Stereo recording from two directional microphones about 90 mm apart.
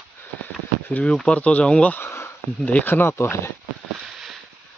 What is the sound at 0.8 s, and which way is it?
Speech, 15° left (ahead or behind).